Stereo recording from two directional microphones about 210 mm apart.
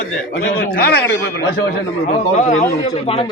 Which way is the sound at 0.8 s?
50° left (ahead or behind).